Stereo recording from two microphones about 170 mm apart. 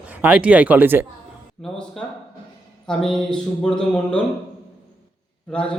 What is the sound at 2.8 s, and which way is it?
Speech, 5° left (ahead or behind).